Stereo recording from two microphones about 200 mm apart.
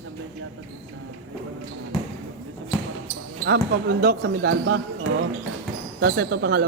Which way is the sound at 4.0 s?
50° right (ahead or behind).